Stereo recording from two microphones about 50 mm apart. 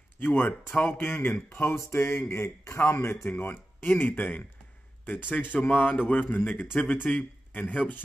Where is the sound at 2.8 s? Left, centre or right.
Left.